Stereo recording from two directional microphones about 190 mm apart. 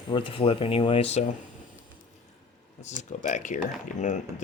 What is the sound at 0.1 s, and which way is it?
Speech, 25° left (ahead or behind).